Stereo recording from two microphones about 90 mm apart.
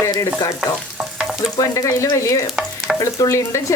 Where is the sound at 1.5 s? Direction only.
35° left (ahead or behind).